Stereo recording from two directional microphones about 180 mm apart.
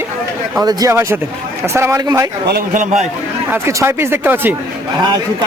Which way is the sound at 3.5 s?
15° right (ahead or behind).